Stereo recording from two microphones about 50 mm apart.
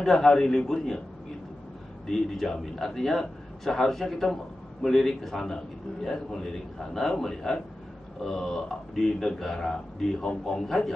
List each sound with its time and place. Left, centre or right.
0.0 s speech: centre
2.0 s a man's voice: centre